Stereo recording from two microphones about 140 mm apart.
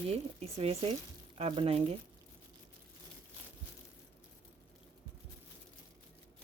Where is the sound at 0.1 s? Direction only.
45° right (ahead or behind).